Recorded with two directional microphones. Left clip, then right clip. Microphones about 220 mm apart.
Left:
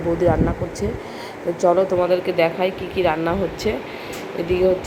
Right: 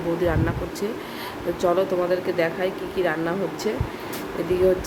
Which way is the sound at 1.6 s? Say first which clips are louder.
Left 5 dB; 10° left (ahead or behind).